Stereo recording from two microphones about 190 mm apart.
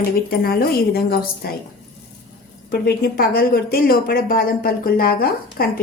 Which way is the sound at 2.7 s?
50° left (ahead or behind).